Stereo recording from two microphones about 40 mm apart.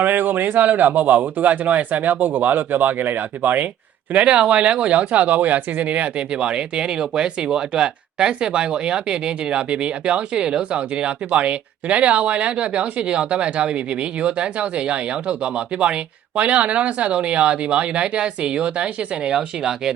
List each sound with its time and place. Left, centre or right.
0.0 s speech: right
4.1 s speech: right